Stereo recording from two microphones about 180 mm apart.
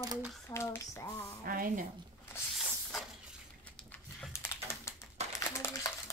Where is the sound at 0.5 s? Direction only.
15° left (ahead or behind).